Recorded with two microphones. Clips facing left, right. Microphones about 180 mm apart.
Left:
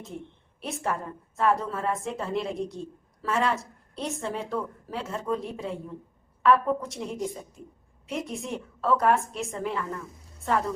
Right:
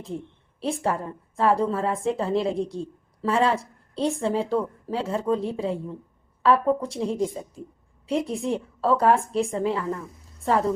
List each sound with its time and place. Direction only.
0.6 s a woman's voice: 30° right (ahead or behind)